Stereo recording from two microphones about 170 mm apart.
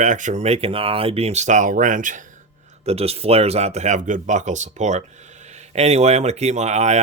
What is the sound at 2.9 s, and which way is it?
Speech, 35° right (ahead or behind).